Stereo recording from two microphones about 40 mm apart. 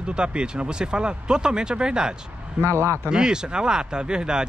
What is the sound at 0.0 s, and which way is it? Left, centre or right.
Speech, right.